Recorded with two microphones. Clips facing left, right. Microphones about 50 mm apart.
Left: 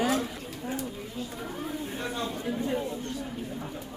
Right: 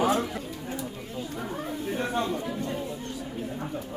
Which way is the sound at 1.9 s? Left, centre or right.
Right.